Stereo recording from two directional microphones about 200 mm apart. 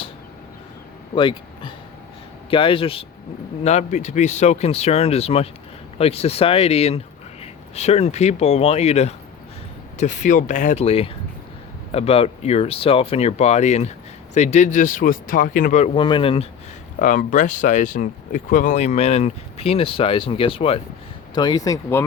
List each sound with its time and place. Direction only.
1.1 s speech: 25° left (ahead or behind); by 15.9 s 40° left (ahead or behind)
16.0 s speech: 25° left (ahead or behind)
17.0 s speech: 40° left (ahead or behind); by 22.0 s 15° left (ahead or behind)